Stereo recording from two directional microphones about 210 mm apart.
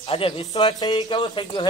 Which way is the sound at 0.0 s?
25° left (ahead or behind).